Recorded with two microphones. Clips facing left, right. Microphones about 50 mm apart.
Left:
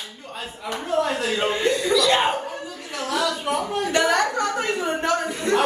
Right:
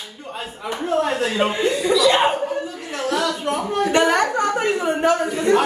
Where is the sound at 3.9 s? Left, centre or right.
Right.